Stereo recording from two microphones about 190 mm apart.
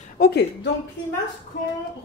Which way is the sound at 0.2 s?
50° left (ahead or behind).